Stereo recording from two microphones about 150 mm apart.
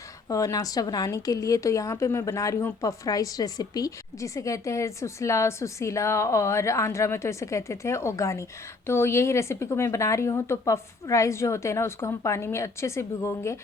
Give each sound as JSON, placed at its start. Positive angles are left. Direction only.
{"t": 0.3, "sound": "a woman's voice", "side_deg": 20}